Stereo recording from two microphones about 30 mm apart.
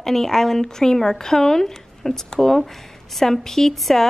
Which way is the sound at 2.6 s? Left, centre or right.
Centre.